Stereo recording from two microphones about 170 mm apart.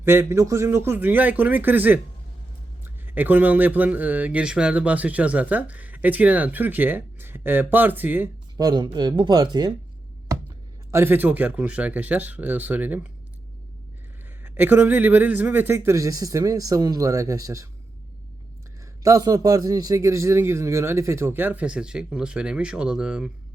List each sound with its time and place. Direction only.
0.0 s speech: 15° right (ahead or behind)
8.5 s speech: 25° right (ahead or behind)
10.9 s speech: 10° right (ahead or behind)
14.4 s speech: 10° right (ahead or behind)
19.0 s speech: 20° right (ahead or behind); by 23.3 s 5° right (ahead or behind)